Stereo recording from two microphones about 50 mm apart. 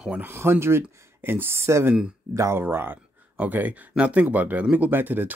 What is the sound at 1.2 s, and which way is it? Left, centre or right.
Speech, right.